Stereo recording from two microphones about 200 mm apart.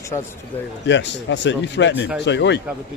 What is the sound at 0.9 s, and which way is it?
Speech, 65° left (ahead or behind).